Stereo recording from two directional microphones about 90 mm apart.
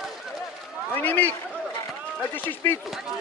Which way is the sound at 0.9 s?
20° left (ahead or behind).